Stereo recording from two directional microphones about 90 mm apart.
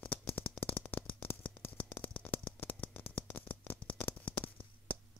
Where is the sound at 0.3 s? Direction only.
20° left (ahead or behind).